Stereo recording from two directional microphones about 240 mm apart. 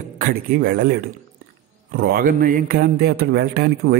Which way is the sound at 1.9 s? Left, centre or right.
Right.